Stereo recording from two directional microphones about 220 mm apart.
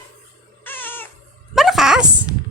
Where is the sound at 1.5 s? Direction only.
Centre (ahead or behind).